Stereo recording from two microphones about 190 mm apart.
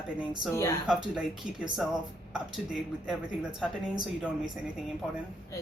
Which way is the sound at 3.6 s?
Centre (ahead or behind).